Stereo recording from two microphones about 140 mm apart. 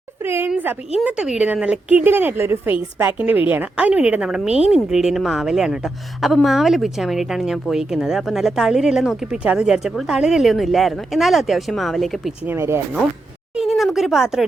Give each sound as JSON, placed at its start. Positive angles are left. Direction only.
{"t": 0.3, "sound": "a sound", "side_deg": -15}
{"t": 1.0, "sound": "a woman's voice", "side_deg": -5}
{"t": 12.5, "sound": "a woman's voice", "side_deg": -20}
{"t": 13.6, "sound": "a woman's voice", "side_deg": 0}